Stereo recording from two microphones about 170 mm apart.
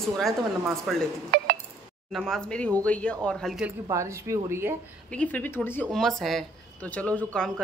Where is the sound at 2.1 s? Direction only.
Centre (ahead or behind).